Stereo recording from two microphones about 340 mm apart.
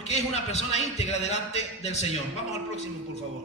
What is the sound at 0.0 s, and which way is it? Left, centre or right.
A man's voice, centre.